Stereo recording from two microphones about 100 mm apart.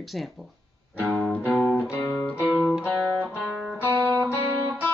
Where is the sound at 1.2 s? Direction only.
15° left (ahead or behind).